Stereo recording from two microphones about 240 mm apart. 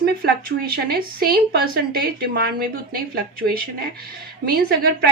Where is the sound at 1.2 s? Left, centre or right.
Right.